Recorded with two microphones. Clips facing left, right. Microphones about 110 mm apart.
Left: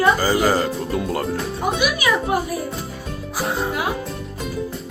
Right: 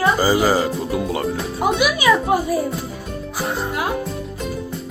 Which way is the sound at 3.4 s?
Centre (ahead or behind).